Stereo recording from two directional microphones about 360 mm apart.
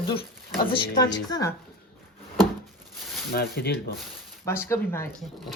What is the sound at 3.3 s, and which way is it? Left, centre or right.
Speech, left.